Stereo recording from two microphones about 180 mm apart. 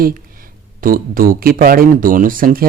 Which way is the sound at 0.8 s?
50° right (ahead or behind).